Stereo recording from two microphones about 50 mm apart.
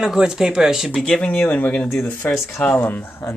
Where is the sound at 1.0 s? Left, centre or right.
Left.